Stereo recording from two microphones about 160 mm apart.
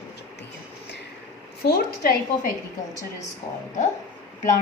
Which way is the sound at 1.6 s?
75° left (ahead or behind).